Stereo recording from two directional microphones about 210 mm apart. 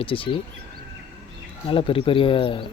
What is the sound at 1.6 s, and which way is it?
Speech, 25° left (ahead or behind).